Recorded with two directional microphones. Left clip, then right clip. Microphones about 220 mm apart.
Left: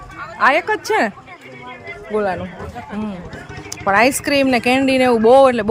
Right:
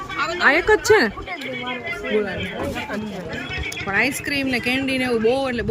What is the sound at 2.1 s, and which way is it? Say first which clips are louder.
Speech: left 4 dB; 15° left (ahead or behind).